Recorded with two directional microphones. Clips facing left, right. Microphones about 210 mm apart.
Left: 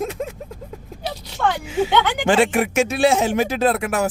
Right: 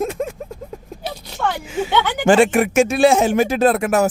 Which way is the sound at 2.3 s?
50° right (ahead or behind).